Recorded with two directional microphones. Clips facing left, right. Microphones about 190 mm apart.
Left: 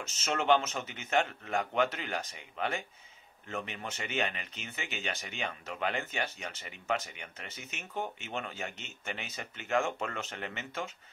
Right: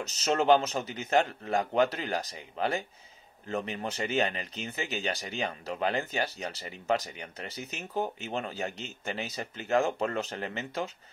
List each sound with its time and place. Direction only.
0.0 s speech: 35° right (ahead or behind)